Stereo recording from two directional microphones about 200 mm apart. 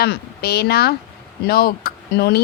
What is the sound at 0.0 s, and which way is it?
A woman's voice, 55° left (ahead or behind).